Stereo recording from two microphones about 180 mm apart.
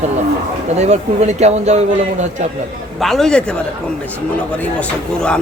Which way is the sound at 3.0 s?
Centre (ahead or behind).